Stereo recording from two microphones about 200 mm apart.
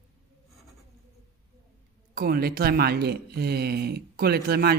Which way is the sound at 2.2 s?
50° right (ahead or behind).